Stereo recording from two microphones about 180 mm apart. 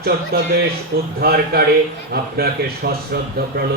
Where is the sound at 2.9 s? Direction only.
60° right (ahead or behind).